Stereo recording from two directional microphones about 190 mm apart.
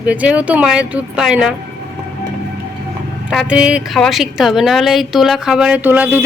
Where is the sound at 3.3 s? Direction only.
Centre (ahead or behind).